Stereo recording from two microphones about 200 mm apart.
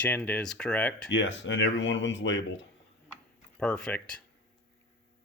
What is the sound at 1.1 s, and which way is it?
Speech, 65° left (ahead or behind).